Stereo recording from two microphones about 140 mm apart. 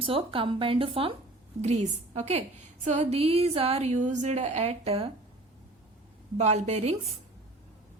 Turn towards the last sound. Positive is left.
turn(degrees=-50)  # may be behind; listen again after turning